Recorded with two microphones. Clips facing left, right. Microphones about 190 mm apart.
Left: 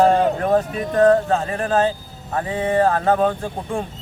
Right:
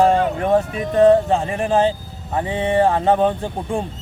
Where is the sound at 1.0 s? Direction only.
20° right (ahead or behind).